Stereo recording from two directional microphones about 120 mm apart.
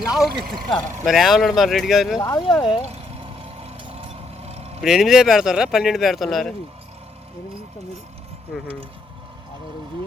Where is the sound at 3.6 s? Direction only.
60° right (ahead or behind).